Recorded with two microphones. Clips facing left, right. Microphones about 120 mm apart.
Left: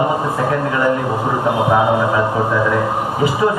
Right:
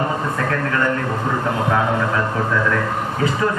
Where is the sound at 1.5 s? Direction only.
15° left (ahead or behind).